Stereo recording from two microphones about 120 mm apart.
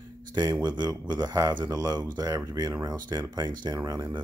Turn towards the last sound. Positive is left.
turn(degrees=-25)  # may be behind; listen again after turning